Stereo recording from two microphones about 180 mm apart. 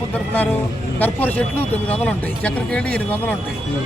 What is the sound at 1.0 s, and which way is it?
A man's voice, 10° left (ahead or behind).